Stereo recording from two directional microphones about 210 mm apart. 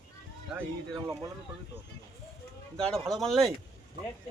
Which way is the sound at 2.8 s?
5° left (ahead or behind).